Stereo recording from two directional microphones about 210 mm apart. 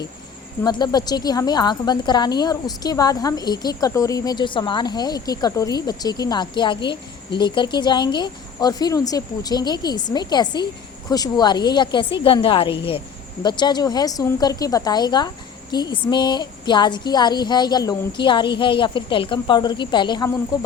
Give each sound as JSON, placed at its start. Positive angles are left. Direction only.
{"t": 0.6, "sound": "a woman's voice", "side_deg": 20}